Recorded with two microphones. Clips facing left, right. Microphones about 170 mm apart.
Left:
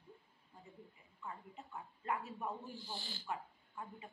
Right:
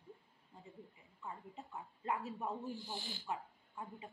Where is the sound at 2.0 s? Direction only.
30° right (ahead or behind).